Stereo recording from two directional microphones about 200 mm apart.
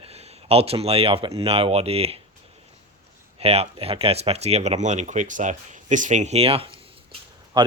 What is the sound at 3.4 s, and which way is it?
Speech, 30° right (ahead or behind).